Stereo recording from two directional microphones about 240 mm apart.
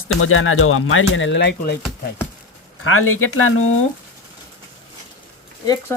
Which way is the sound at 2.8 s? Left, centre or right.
Left.